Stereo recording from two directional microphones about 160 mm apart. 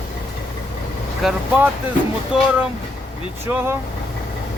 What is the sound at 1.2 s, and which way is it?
Speech, centre (ahead or behind).